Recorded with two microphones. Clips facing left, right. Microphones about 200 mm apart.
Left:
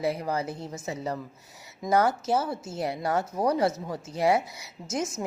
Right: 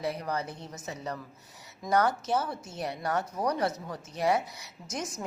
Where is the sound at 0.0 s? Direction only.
25° left (ahead or behind).